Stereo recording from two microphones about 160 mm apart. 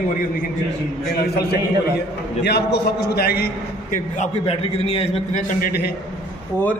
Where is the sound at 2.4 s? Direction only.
90° left.